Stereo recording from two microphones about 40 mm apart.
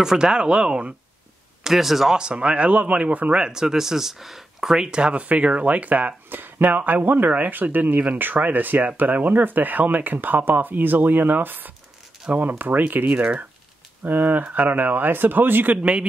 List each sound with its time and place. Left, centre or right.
0.0 s speech: centre
1.6 s speech: centre
2.1 s speech: right
3.4 s speech: centre
4.7 s speech: centre; by 13.0 s right
13.0 s speech: right
15.8 s speech: right